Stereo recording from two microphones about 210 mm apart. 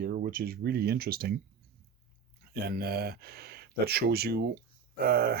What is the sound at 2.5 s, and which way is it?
Speech, 45° right (ahead or behind).